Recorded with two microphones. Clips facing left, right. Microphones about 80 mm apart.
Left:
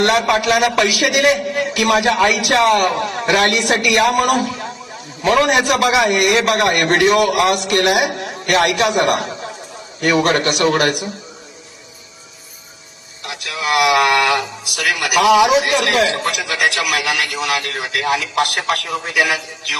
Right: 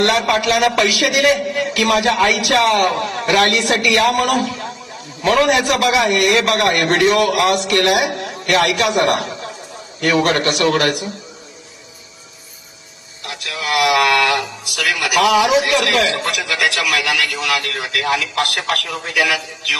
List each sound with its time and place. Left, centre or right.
0.3 s a man's voice: left
6.8 s a man's voice: left
8.2 s a sound: left
9.0 s a man's voice: left
13.2 s a man's voice: left